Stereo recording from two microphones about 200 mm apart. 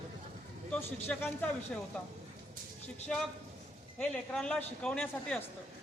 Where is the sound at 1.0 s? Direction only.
10° left (ahead or behind).